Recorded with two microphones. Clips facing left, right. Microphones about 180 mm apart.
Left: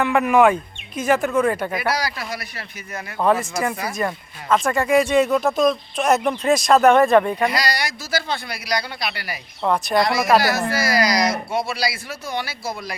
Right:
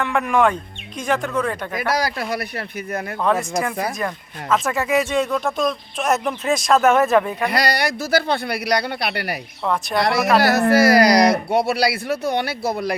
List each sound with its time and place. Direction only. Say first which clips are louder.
0.0 s speech: left 3 dB; 5° left (ahead or behind)
1.9 s speech: right 3 dB; 50° right (ahead or behind)
3.2 s speech: left 1 dB; 5° left (ahead or behind)
7.5 s speech: right 4 dB; 60° right (ahead or behind)
9.6 s speech: left 2 dB; centre (ahead or behind)
10.0 s speech: right 2 dB; 65° right (ahead or behind)